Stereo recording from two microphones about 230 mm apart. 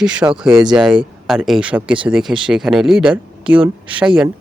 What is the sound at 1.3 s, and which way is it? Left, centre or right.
Speech, centre.